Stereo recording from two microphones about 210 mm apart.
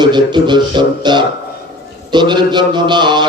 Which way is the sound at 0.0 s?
20° right (ahead or behind).